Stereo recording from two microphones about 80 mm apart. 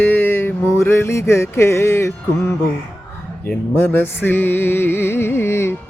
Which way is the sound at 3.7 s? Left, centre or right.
Left.